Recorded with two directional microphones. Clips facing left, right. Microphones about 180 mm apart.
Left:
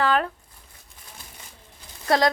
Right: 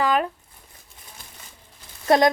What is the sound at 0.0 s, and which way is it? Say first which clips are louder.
Tearing: right 1 dB; 10° right (ahead or behind).